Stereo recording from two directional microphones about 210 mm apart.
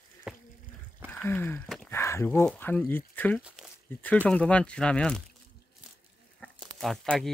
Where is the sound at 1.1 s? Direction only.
10° left (ahead or behind).